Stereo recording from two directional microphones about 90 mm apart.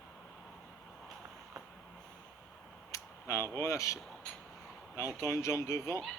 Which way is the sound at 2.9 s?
30° left (ahead or behind).